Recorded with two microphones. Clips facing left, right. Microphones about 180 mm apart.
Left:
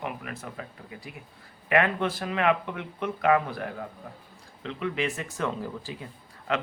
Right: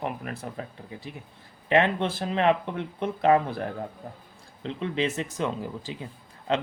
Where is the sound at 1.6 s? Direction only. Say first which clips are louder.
Right 2 dB; 25° right (ahead or behind).